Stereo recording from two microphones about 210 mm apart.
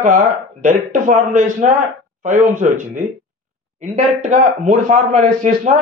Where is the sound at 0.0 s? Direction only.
40° right (ahead or behind).